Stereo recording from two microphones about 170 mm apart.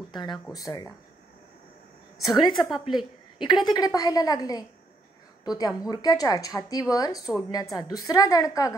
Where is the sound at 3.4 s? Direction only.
25° left (ahead or behind).